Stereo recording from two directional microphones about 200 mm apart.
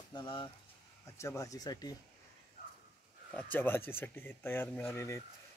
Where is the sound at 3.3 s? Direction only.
5° left (ahead or behind).